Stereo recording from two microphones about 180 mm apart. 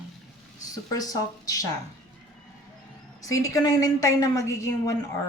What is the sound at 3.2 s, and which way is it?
A woman's voice, 20° left (ahead or behind).